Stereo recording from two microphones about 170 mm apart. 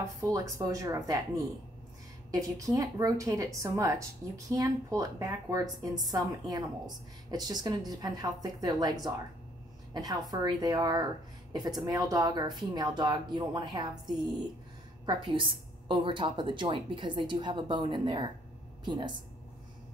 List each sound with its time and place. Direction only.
0.2 s a woman's voice: 20° right (ahead or behind)
2.4 s a woman's voice: 20° right (ahead or behind)